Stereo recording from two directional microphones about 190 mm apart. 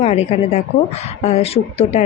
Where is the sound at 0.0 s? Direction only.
35° left (ahead or behind).